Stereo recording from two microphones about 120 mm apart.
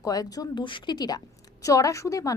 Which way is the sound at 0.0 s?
30° left (ahead or behind).